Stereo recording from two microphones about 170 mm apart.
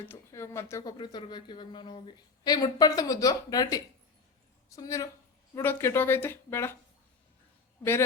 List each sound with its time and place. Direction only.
0.0 s speech: 15° left (ahead or behind)